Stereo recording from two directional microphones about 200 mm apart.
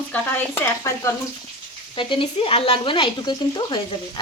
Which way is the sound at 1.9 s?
25° left (ahead or behind).